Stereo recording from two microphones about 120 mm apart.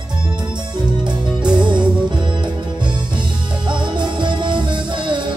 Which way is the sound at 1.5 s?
40° right (ahead or behind).